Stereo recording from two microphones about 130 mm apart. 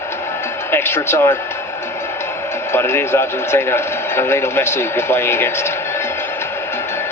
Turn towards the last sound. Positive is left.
turn(degrees=20)  # may be behind; listen again after turning